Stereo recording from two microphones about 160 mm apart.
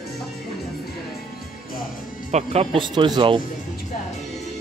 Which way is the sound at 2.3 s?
40° right (ahead or behind).